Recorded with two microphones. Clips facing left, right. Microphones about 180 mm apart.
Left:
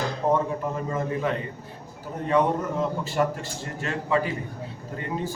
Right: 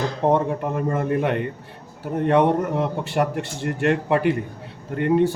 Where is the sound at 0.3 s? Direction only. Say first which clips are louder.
Right 4 dB; 60° right (ahead or behind).